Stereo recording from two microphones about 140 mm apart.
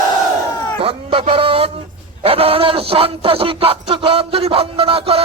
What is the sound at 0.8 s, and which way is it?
A man's voice, 40° right (ahead or behind).